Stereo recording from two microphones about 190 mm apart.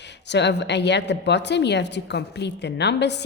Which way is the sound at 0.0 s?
65° left (ahead or behind).